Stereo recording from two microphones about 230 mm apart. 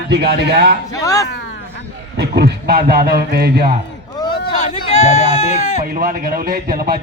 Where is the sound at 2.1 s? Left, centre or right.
Right.